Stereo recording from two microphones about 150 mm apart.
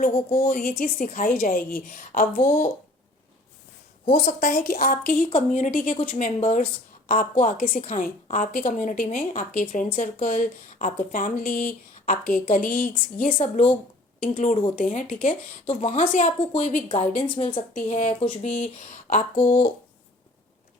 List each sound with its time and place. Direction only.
0.3 s a woman's voice: 70° left (ahead or behind)
4.1 s a woman's voice: 65° left (ahead or behind)
5.5 s a woman's voice: 50° left (ahead or behind)
17.3 s a woman's voice: 35° left (ahead or behind)
17.7 s a woman's voice: 50° left (ahead or behind)